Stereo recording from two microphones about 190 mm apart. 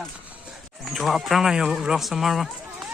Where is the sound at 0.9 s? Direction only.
Centre (ahead or behind).